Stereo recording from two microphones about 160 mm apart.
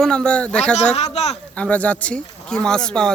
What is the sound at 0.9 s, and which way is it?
Speech, 40° left (ahead or behind).